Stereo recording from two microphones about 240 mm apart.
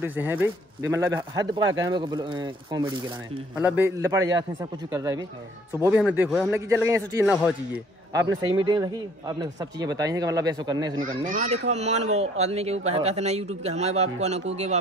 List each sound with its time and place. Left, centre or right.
0.0 s a man's voice: centre
3.5 s a man's voice: centre
11.0 s a man's voice: right